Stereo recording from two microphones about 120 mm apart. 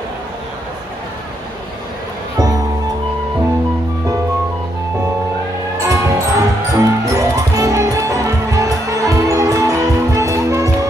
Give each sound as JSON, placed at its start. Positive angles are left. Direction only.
{"t": 2.3, "sound": "music", "side_deg": -30}
{"t": 5.8, "sound": "music", "side_deg": -25}